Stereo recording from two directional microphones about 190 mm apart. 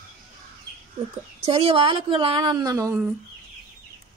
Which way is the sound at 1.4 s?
30° right (ahead or behind).